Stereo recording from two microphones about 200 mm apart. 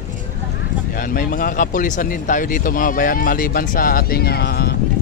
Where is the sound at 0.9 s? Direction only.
45° left (ahead or behind).